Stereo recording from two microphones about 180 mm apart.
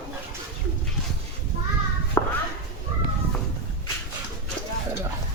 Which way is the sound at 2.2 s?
15° left (ahead or behind).